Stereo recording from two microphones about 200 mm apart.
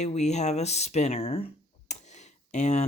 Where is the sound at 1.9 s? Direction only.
35° left (ahead or behind).